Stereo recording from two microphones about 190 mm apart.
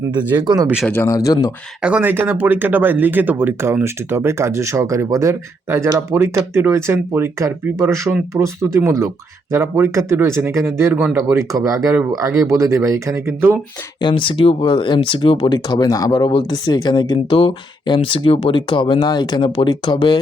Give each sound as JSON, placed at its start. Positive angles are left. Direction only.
{"t": 0.3, "sound": "speech", "side_deg": -20}
{"t": 0.9, "sound": "speech", "side_deg": 10}
{"t": 1.8, "sound": "speech", "side_deg": -10}
{"t": 11.5, "sound": "speech", "side_deg": -15}
{"t": 14.0, "sound": "speech", "side_deg": 25}